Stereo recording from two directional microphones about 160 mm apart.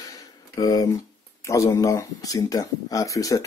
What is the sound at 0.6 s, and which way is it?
Speech, 25° left (ahead or behind).